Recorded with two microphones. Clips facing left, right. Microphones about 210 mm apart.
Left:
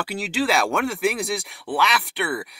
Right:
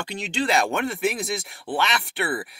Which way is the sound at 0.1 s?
5° left (ahead or behind).